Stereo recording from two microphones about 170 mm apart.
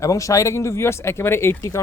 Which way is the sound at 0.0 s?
20° left (ahead or behind).